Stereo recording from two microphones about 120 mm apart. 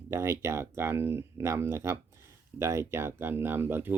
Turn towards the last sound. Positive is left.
turn(degrees=-20)  # may be behind; listen again after turning